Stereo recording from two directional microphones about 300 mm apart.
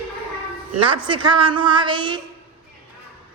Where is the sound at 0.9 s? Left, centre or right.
Centre.